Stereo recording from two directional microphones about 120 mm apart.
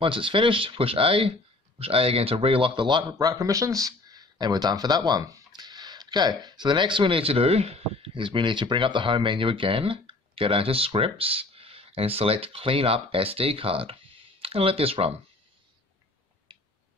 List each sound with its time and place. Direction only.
0.0 s speech: 45° right (ahead or behind)
16.5 s tick-tock: 40° right (ahead or behind)